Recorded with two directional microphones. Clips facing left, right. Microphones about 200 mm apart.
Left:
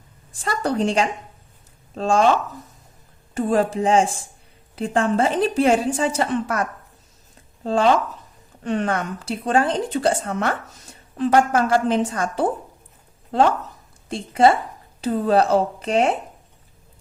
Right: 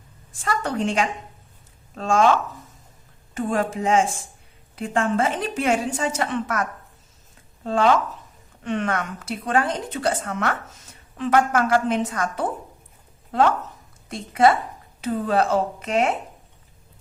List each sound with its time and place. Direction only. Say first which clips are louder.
0.4 s speech: left 3 dB; 35° left (ahead or behind)
3.3 s speech: left 4 dB; 35° left (ahead or behind)
14.1 s speech: left 2 dB; 30° left (ahead or behind)